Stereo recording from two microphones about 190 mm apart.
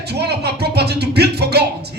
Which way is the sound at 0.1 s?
60° right (ahead or behind).